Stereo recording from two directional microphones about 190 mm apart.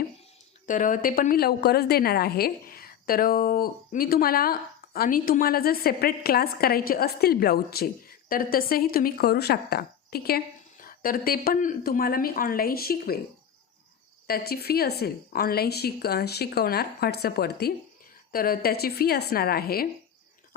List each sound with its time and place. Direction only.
0.7 s a woman's voice: 45° left (ahead or behind)
14.3 s a woman's voice: 50° left (ahead or behind)